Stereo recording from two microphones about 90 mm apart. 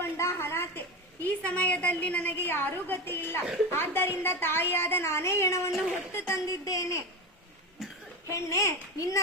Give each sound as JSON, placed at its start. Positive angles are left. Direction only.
{"t": 0.0, "sound": "a sound", "side_deg": 30}
{"t": 1.2, "sound": "a woman's voice", "side_deg": 15}
{"t": 6.4, "sound": "a child's voice", "side_deg": 40}
{"t": 7.8, "sound": "cough", "side_deg": -5}
{"t": 8.3, "sound": "a child's voice", "side_deg": 35}